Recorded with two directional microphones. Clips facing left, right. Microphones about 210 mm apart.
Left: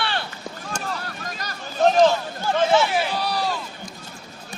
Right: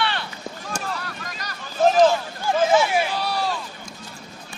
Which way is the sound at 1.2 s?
45° left (ahead or behind).